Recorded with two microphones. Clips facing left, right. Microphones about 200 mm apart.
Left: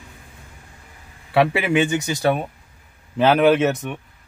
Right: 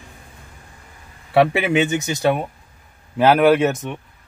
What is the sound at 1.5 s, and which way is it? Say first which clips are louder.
Speech: right 1 dB; 20° right (ahead or behind).